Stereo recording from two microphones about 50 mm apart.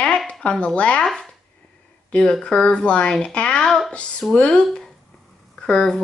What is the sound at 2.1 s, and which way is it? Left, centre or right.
Speech, centre.